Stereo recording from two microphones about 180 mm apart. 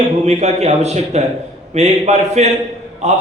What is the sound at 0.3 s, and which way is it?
A man's voice, 40° right (ahead or behind).